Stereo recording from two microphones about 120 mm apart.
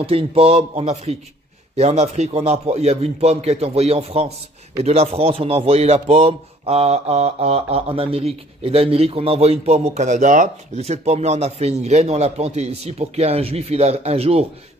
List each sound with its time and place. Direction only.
0.0 s mantra: 55° right (ahead or behind)